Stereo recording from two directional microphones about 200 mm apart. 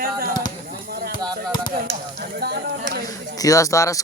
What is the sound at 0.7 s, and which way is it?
Basketball bounce, 50° right (ahead or behind).